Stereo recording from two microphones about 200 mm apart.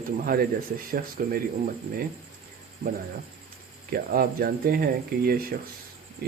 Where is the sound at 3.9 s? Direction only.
50° right (ahead or behind).